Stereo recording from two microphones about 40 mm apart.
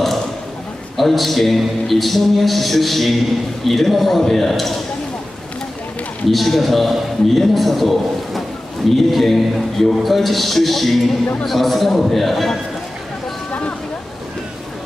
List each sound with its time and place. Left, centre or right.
0.9 s a man's voice: centre
6.2 s a man's voice: centre